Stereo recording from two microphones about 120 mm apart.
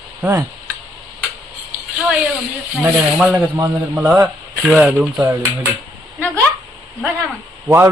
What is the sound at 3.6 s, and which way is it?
Speech, 30° right (ahead or behind).